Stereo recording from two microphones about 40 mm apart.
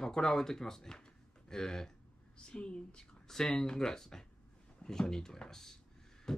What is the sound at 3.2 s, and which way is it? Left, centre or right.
Speech, centre.